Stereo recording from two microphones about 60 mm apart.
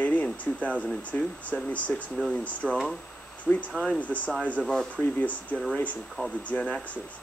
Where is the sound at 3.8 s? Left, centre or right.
Left.